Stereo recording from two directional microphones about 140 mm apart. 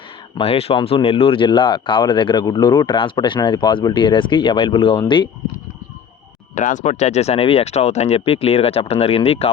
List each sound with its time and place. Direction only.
0.3 s speech: 45° left (ahead or behind)
6.6 s speech: 60° left (ahead or behind)